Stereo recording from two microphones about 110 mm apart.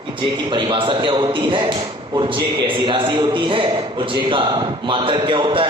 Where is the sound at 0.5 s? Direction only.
45° right (ahead or behind).